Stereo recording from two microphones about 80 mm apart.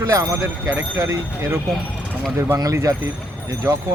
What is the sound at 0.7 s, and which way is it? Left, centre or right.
Speech, right.